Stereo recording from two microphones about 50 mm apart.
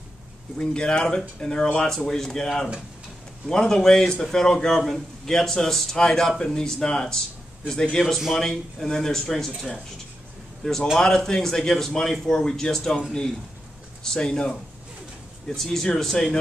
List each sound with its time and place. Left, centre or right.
0.6 s a man's voice: centre
14.0 s a man's voice: centre